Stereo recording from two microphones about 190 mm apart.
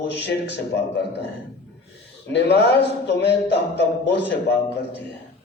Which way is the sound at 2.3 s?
65° left (ahead or behind).